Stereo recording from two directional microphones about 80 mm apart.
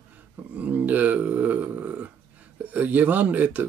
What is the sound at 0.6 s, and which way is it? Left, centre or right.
Dog, right.